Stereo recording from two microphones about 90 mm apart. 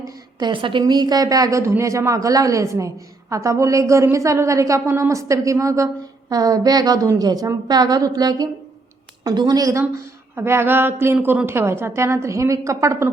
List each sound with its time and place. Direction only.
0.0 s a sound: 50° right (ahead or behind)
0.5 s a woman's voice: 65° right (ahead or behind); by 9.8 s 40° right (ahead or behind)
10.3 s a woman's voice: 25° right (ahead or behind)